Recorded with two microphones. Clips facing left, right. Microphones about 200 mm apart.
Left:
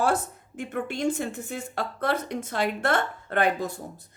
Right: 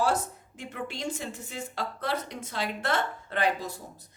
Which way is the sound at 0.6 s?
55° left (ahead or behind).